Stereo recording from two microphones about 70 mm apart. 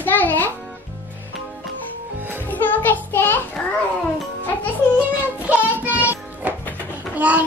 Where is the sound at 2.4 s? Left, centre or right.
Left.